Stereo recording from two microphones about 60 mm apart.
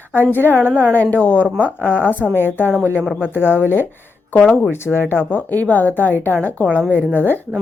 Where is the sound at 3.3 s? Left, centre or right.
Left.